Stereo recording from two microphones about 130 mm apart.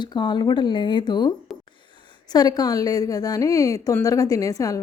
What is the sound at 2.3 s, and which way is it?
A woman's voice, 30° left (ahead or behind).